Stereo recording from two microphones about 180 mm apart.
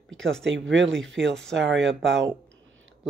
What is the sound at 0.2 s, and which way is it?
Speech, 5° left (ahead or behind).